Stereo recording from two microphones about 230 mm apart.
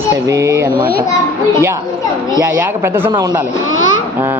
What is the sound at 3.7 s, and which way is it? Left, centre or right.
Speech, right.